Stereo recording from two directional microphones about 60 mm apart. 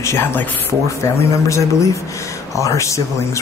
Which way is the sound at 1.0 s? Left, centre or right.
Left.